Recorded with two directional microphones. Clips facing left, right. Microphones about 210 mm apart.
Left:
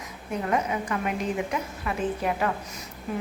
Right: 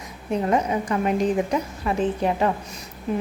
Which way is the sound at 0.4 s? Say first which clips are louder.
Right 4 dB; 30° right (ahead or behind).